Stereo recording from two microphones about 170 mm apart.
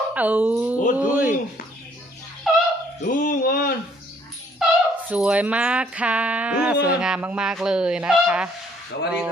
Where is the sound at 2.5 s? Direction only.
Centre (ahead or behind).